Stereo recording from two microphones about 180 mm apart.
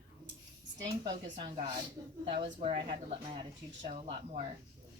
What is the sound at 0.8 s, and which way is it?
Speech, 25° right (ahead or behind).